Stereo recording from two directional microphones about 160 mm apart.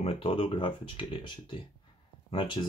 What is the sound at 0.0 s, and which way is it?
Speech, 35° left (ahead or behind).